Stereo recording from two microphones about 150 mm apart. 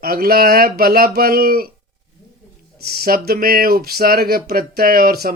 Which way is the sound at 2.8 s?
90° right.